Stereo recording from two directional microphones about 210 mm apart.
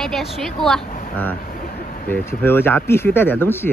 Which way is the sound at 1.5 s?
40° left (ahead or behind).